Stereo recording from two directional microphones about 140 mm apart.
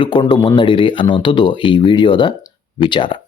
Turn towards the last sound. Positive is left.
turn(degrees=35)  # may be behind; listen again after turning